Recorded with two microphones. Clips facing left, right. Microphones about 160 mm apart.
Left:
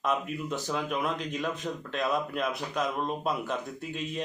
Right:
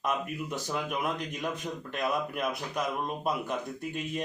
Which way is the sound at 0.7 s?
10° right (ahead or behind).